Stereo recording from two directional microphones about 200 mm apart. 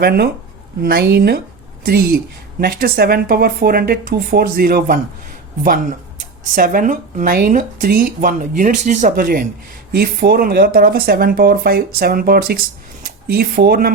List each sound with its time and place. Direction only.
0.0 s a woman's voice: 50° right (ahead or behind)
6.6 s a woman's voice: 40° right (ahead or behind)